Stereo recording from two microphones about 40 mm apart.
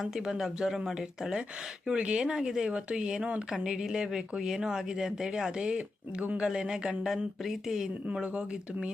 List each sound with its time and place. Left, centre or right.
0.0 s speech: centre
1.9 s speech: right
8.1 s speech: right